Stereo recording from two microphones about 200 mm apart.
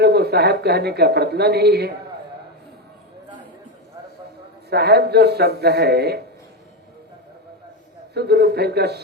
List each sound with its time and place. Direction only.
0.0 s speech: 55° right (ahead or behind)
4.7 s speech: 55° right (ahead or behind)
8.1 s speech: 55° right (ahead or behind)